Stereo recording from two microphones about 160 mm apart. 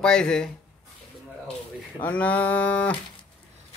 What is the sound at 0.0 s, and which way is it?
Speech, 5° left (ahead or behind).